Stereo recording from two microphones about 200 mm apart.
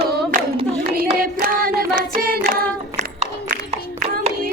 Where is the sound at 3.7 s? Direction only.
30° right (ahead or behind).